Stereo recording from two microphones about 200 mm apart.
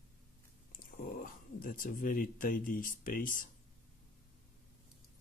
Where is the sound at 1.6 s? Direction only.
45° left (ahead or behind).